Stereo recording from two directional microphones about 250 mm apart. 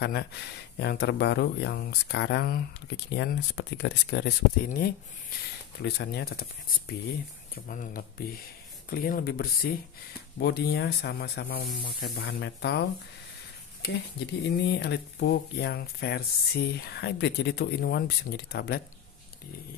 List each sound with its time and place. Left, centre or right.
0.0 s speech: left
7.5 s speech: left
13.8 s speech: left